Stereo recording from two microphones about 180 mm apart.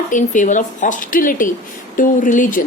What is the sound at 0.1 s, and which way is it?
A woman's voice, 45° left (ahead or behind).